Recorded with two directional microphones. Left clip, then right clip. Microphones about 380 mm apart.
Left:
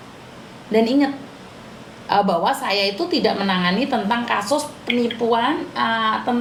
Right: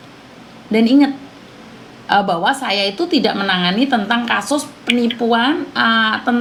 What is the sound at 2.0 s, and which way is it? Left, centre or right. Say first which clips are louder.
A woman's voice: right 3 dB; right.